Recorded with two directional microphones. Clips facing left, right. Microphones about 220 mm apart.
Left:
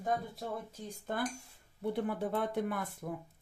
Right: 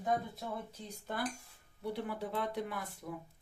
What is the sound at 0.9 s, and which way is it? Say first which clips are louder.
Speech: left 3 dB; 50° left (ahead or behind).